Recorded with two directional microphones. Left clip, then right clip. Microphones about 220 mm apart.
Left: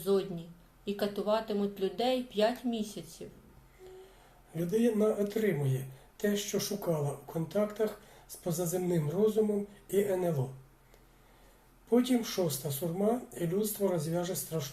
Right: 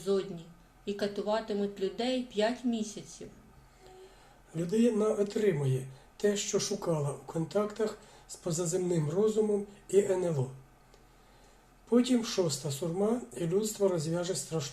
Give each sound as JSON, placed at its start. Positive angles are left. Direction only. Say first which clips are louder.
{"t": 0.0, "sound": "a sound", "louder": "left 1 dB", "side_deg": 10}
{"t": 0.9, "sound": "speech", "louder": "left 1 dB", "side_deg": 10}
{"t": 4.5, "sound": "speech", "louder": "right 1 dB", "side_deg": -15}
{"t": 11.9, "sound": "speech", "louder": "right 1 dB", "side_deg": -15}